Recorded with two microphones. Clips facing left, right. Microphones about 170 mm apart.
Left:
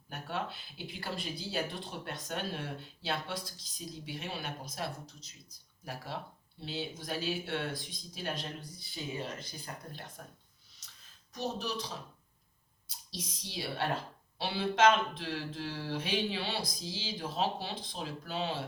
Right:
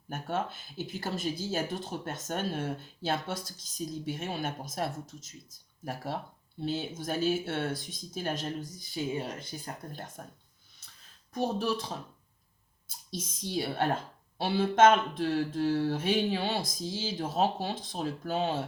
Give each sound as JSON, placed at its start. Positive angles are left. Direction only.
{"t": 0.1, "sound": "a woman's voice", "side_deg": -45}
{"t": 10.8, "sound": "a sound", "side_deg": -55}
{"t": 11.3, "sound": "a woman's voice", "side_deg": -50}
{"t": 13.1, "sound": "a woman's voice", "side_deg": -45}